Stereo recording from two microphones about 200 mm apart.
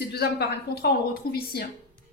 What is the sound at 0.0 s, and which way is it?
Speech, 55° left (ahead or behind).